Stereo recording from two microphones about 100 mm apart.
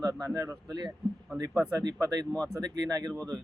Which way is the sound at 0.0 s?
40° right (ahead or behind).